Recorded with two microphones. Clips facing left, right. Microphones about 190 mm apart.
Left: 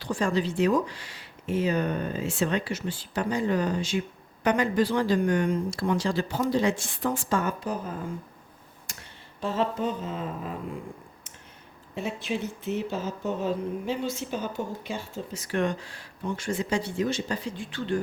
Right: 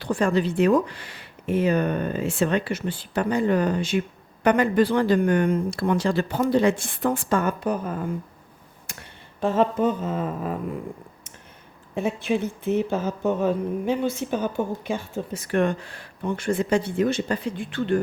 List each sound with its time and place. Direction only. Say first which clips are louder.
0.0 s speech: right 4 dB; 60° right (ahead or behind)
8.9 s a sound: right 5 dB; 60° right (ahead or behind)
9.4 s speech: right 6 dB; 50° right (ahead or behind)
11.9 s speech: right 6 dB; 55° right (ahead or behind)